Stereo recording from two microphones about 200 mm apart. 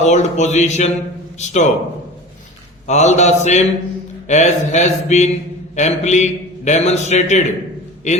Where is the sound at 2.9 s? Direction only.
35° left (ahead or behind).